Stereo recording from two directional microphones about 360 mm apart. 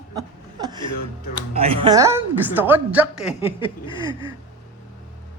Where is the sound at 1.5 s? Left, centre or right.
Centre.